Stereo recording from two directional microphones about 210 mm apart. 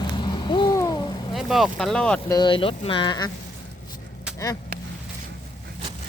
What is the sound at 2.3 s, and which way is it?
Speech, 20° left (ahead or behind).